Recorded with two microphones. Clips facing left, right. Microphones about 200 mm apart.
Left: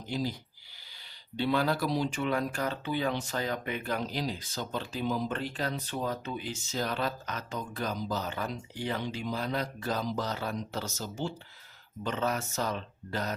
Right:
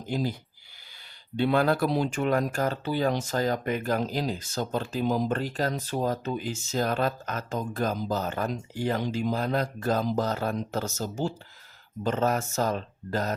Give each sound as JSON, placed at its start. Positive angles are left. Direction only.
{"t": 0.1, "sound": "speech", "side_deg": -50}
{"t": 1.4, "sound": "speech", "side_deg": -55}